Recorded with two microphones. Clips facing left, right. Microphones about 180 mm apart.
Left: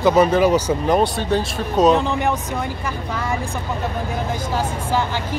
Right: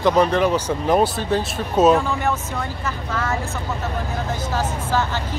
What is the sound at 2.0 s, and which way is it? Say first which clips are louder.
Speech: left 2 dB; 20° left (ahead or behind).